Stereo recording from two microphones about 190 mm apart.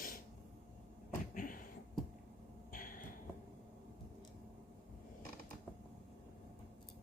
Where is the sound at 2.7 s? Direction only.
45° left (ahead or behind).